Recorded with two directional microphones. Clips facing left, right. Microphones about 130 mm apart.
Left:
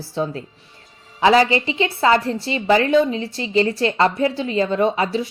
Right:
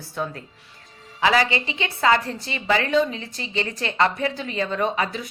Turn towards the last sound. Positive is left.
turn(degrees=30)  # may be behind; listen again after turning